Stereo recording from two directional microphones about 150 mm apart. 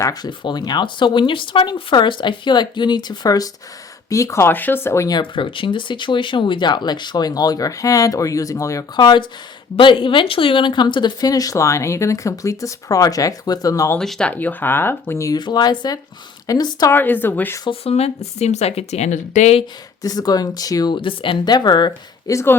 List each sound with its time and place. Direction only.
0.0 s speech: 25° left (ahead or behind)
14.0 s speech: 5° left (ahead or behind); by 16.9 s 25° left (ahead or behind)
16.9 s speech: 15° left (ahead or behind)
17.7 s a woman's voice: 40° left (ahead or behind)
20.0 s speech: 25° left (ahead or behind)